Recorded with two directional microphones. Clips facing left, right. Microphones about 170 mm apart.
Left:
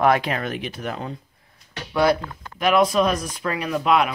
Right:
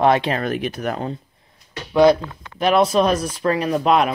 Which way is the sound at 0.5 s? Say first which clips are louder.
Right 5 dB; 50° right (ahead or behind).